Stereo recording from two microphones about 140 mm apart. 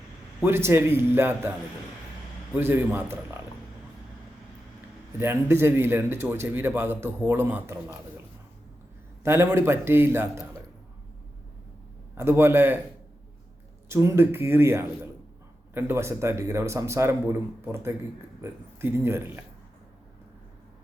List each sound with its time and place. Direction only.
0.4 s a man's voice: 15° right (ahead or behind)
2.6 s a man's voice: 15° right (ahead or behind)
5.2 s a man's voice: 15° right (ahead or behind)
9.2 s a man's voice: 15° right (ahead or behind)
12.1 s a man's voice: 15° right (ahead or behind)
13.8 s a man's voice: 20° right (ahead or behind)